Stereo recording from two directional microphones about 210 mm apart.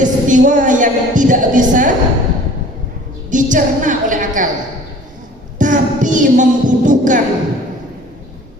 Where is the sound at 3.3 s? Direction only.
40° right (ahead or behind).